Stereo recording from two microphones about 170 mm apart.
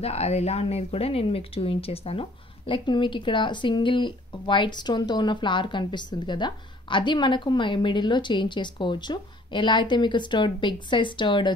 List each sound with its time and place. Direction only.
0.0 s speech: 40° left (ahead or behind)